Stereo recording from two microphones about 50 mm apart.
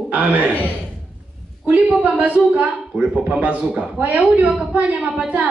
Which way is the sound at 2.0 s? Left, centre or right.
Right.